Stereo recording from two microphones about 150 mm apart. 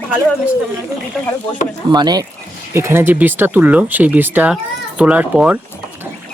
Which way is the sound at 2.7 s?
15° right (ahead or behind).